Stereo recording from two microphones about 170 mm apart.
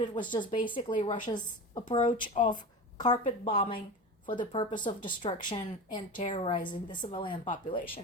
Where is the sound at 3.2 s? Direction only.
35° left (ahead or behind).